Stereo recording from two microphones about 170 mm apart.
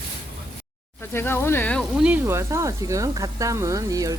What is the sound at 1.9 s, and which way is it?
Speech, 5° right (ahead or behind).